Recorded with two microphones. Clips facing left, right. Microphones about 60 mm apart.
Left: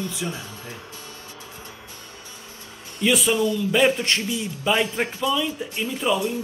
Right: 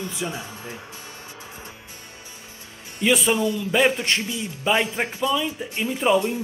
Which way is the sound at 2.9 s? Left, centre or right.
Right.